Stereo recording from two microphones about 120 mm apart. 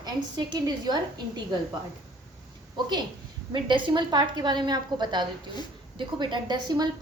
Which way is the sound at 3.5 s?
40° right (ahead or behind).